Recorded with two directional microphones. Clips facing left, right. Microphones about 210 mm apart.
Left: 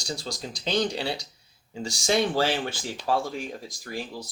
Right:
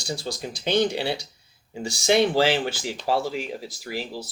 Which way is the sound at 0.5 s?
60° right (ahead or behind).